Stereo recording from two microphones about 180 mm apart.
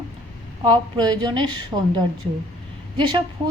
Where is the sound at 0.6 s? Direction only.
25° right (ahead or behind).